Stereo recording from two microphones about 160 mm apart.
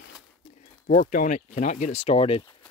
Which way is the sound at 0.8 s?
55° left (ahead or behind).